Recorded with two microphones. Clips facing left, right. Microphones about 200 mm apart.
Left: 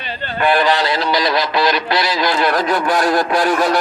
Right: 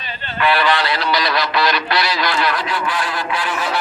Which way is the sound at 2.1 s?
40° left (ahead or behind).